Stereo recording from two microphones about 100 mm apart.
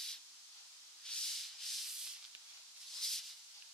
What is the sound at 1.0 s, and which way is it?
Rub, 5° left (ahead or behind).